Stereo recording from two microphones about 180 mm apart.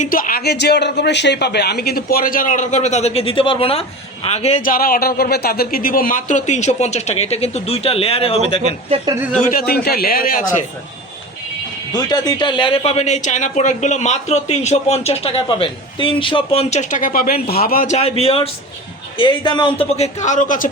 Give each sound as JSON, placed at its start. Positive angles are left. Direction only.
{"t": 0.0, "sound": "a man's voice", "side_deg": 50}
{"t": 9.4, "sound": "a man's voice", "side_deg": 55}
{"t": 11.9, "sound": "speech", "side_deg": 20}